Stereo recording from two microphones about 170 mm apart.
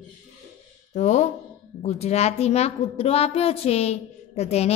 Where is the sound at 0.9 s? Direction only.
45° left (ahead or behind).